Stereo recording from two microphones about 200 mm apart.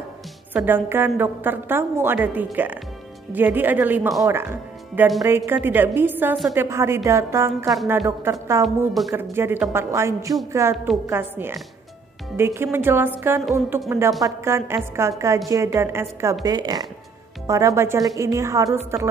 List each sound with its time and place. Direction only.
0.5 s a woman's voice: 10° right (ahead or behind)
8.6 s a woman's voice: centre (ahead or behind)
9.1 s a woman's voice: 10° right (ahead or behind)